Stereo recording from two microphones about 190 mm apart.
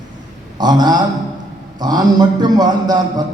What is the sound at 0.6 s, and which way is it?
A man's voice, 20° right (ahead or behind).